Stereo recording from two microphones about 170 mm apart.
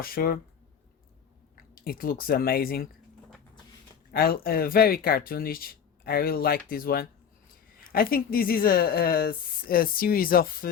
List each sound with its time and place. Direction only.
0.0 s speech: 60° left (ahead or behind)
1.5 s speech: 60° left (ahead or behind)
4.1 s speech: 60° left (ahead or behind)